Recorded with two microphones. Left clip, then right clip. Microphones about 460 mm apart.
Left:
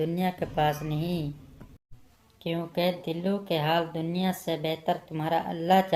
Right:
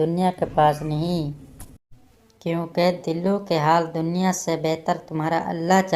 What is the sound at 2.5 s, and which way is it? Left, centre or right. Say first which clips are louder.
Speech: right 7 dB; left.